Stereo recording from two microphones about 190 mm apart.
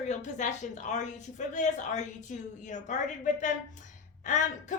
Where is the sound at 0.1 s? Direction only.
40° left (ahead or behind).